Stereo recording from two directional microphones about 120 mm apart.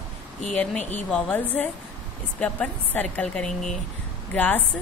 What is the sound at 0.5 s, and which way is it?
A woman's voice, 10° left (ahead or behind).